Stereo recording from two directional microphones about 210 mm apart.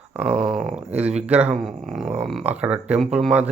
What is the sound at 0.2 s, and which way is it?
Speech, centre (ahead or behind).